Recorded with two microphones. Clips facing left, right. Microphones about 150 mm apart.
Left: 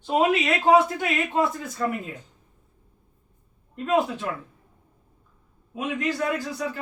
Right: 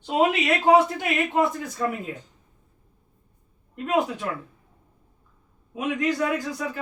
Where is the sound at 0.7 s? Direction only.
20° right (ahead or behind).